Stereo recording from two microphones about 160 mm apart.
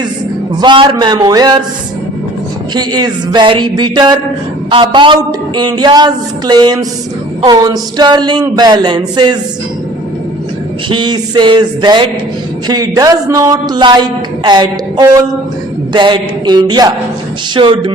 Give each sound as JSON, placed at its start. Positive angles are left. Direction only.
{"t": 0.6, "sound": "a man's voice", "side_deg": -30}
{"t": 2.7, "sound": "a man's voice", "side_deg": -25}
{"t": 10.8, "sound": "a man's voice", "side_deg": -30}